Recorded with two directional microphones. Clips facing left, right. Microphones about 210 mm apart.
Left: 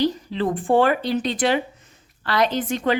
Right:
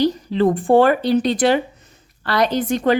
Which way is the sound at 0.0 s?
40° right (ahead or behind).